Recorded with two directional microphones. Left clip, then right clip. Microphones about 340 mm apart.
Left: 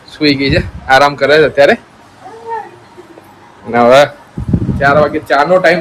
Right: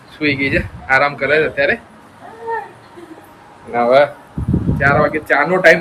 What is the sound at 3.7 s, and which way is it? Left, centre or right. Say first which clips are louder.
Speech: left 5 dB; left.